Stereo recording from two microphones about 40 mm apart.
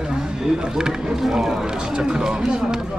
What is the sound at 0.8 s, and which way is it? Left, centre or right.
Speech, centre.